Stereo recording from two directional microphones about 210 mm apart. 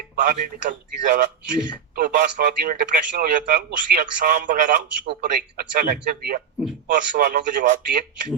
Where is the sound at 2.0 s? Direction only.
45° right (ahead or behind).